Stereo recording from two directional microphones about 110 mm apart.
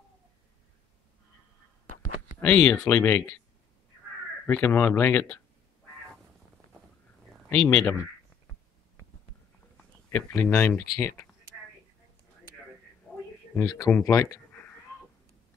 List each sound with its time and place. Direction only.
2.4 s speech: 10° left (ahead or behind)
4.5 s speech: 20° left (ahead or behind)
7.5 s speech: 5° left (ahead or behind)
7.8 s speech: 20° left (ahead or behind)
10.1 s speech: 15° left (ahead or behind)
13.8 s speech: 15° left (ahead or behind)
14.3 s cat: 15° left (ahead or behind)